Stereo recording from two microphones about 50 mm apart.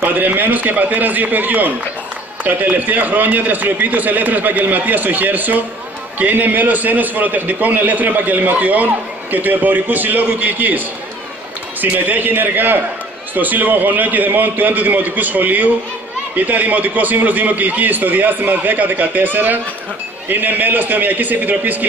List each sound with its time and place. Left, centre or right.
0.0 s a man's voice: right
11.8 s a man's voice: right